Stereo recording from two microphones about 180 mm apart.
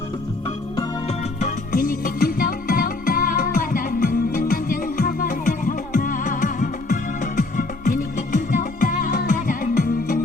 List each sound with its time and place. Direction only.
1.4 s music: 50° left (ahead or behind)